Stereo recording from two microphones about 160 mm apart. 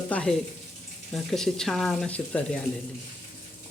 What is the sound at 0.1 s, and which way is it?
Speech, 5° left (ahead or behind).